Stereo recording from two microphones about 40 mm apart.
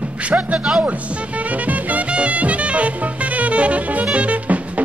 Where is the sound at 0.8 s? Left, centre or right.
Right.